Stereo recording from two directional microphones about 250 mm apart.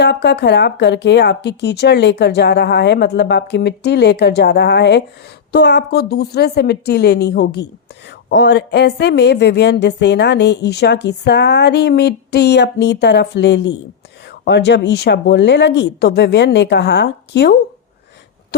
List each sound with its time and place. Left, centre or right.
0.0 s a woman's voice: left